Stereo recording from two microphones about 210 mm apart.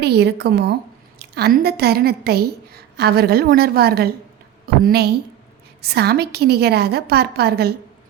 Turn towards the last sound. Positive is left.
turn(degrees=-50)  # may be behind; listen again after turning